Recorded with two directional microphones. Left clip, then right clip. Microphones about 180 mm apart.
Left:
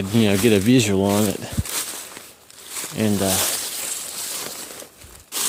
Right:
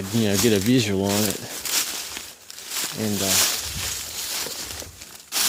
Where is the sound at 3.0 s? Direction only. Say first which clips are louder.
Left 8 dB; 50° left (ahead or behind).